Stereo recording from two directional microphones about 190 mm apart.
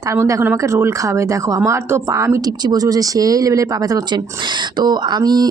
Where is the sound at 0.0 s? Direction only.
15° right (ahead or behind).